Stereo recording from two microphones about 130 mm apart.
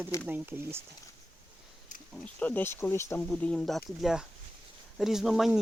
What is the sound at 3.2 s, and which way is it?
Speech, 10° left (ahead or behind).